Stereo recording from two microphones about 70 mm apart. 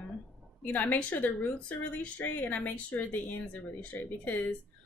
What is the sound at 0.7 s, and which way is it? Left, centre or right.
Speech, left.